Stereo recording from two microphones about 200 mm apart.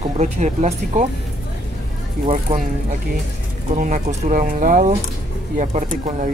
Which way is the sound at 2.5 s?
30° right (ahead or behind).